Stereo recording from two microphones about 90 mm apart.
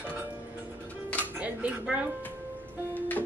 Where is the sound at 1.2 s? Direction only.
15° right (ahead or behind).